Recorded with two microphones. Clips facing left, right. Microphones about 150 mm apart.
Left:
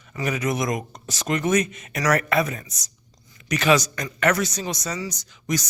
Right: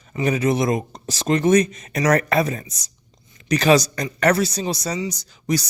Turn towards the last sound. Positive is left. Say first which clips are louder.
# right 4 dB
turn(degrees=-35)  # may be behind; listen again after turning